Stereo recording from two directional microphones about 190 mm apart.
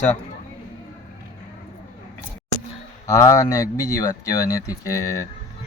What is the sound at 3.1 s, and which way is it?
Speech, 15° left (ahead or behind).